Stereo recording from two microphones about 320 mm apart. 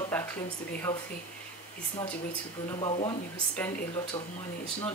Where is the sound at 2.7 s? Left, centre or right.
Centre.